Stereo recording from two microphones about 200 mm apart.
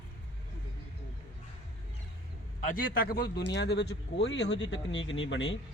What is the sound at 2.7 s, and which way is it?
Speech, 45° left (ahead or behind).